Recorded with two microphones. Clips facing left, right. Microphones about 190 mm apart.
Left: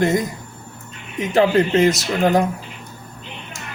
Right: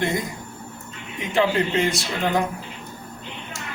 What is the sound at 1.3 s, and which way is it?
A man's voice, 40° left (ahead or behind).